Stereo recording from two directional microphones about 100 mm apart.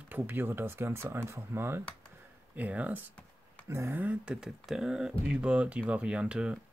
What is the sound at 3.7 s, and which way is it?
Speech, 25° right (ahead or behind).